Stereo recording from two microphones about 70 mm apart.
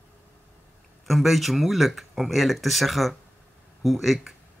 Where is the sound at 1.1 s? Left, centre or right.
Centre.